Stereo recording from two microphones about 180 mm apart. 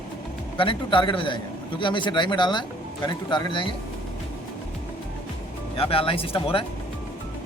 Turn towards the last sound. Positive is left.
turn(degrees=30)  # may be behind; listen again after turning